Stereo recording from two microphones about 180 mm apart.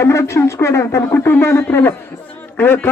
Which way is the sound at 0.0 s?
15° left (ahead or behind).